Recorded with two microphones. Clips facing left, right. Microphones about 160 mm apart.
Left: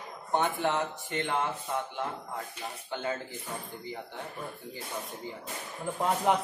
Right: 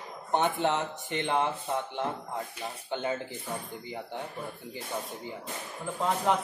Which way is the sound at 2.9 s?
20° right (ahead or behind).